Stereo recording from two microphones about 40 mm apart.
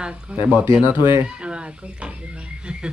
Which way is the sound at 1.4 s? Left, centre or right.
Right.